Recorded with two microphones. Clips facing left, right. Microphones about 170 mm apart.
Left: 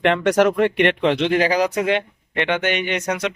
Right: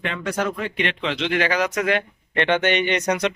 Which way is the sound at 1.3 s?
35° left (ahead or behind).